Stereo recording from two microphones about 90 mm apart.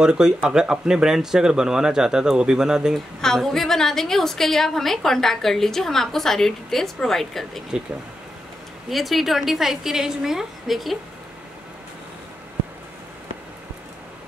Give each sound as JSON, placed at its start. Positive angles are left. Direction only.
{"t": 0.0, "sound": "speech", "side_deg": -10}
{"t": 3.2, "sound": "a woman's voice", "side_deg": 5}
{"t": 8.8, "sound": "a woman's voice", "side_deg": 0}